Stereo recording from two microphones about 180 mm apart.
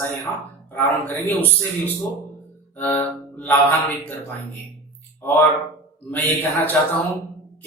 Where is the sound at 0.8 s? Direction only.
10° left (ahead or behind).